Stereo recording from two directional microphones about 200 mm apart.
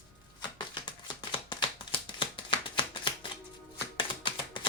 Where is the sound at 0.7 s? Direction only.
25° left (ahead or behind).